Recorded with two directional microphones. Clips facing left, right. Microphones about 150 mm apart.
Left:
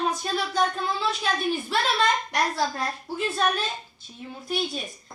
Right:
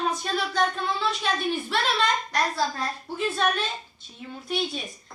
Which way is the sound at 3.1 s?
Centre (ahead or behind).